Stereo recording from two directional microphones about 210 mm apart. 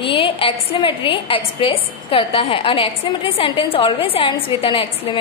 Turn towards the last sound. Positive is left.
turn(degrees=25)  # may be behind; listen again after turning